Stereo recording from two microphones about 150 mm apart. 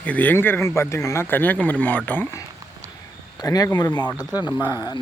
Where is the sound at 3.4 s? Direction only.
25° left (ahead or behind).